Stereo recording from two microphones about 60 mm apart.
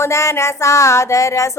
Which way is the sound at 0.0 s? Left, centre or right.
Left.